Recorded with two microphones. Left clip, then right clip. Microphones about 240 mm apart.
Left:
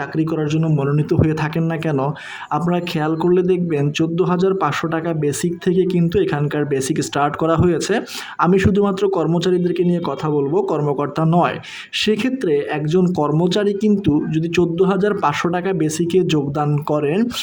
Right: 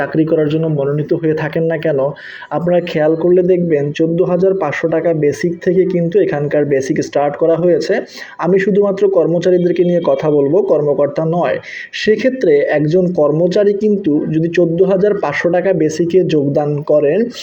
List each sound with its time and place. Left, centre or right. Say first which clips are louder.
0.2 s speech: right 7 dB; centre
10.7 s speech: right 8 dB; left